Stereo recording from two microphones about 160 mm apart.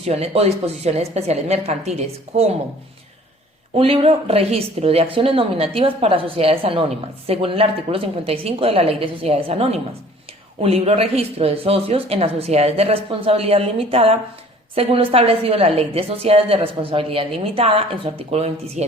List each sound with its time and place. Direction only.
0.0 s a woman's voice: 40° right (ahead or behind)
3.8 s a woman's voice: 35° right (ahead or behind)